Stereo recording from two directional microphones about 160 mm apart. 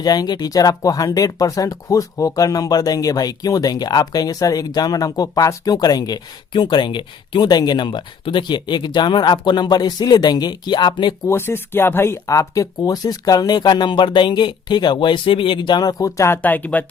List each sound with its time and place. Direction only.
0.0 s speech: 25° left (ahead or behind)
11.3 s speech: 15° left (ahead or behind)